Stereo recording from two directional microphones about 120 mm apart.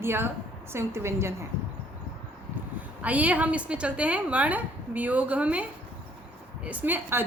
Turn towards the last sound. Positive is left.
turn(degrees=-15)  # may be behind; listen again after turning